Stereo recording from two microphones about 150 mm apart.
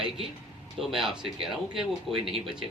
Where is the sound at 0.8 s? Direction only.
Centre (ahead or behind).